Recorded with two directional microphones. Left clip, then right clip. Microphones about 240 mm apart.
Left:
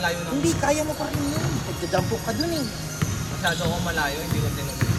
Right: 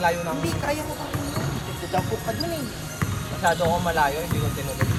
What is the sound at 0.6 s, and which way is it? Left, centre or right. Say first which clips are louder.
Speech: left 4 dB; left.